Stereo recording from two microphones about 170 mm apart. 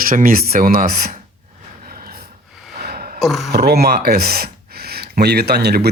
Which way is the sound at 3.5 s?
70° right (ahead or behind).